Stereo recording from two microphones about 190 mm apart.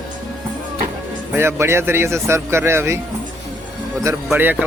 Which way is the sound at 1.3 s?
15° right (ahead or behind).